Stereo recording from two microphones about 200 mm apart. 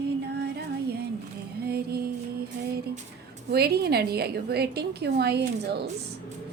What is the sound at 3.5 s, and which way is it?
A woman's voice, 50° right (ahead or behind).